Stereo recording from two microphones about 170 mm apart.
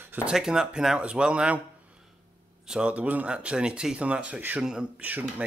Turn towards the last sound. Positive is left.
turn(degrees=-10)  # may be behind; listen again after turning